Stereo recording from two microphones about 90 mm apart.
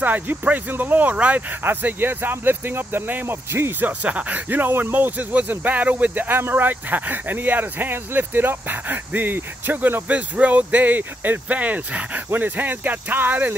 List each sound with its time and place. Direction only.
0.0 s speech: 20° right (ahead or behind)
4.0 s speech: 15° right (ahead or behind)